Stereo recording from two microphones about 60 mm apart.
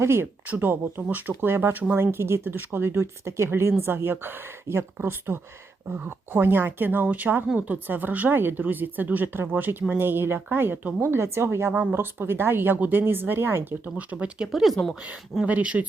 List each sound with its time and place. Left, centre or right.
0.0 s speech: right
0.4 s speech: right
11.7 s speech: right
11.9 s speech: right
14.5 s speech: centre
15.4 s speech: right